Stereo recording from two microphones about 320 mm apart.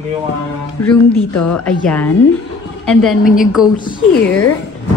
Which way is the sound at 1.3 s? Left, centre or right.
Left.